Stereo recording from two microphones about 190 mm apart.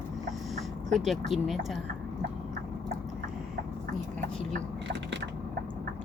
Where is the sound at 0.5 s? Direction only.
Centre (ahead or behind).